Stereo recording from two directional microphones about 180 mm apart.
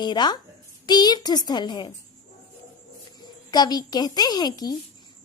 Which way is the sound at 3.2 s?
25° left (ahead or behind).